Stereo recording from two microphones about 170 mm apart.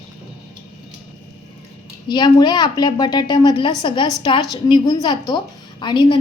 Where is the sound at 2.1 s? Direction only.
25° left (ahead or behind).